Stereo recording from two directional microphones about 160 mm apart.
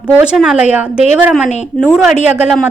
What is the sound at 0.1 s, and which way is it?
Speech, 5° right (ahead or behind).